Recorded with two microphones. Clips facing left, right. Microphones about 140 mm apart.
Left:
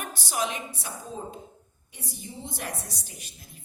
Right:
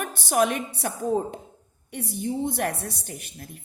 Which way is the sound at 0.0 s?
50° right (ahead or behind).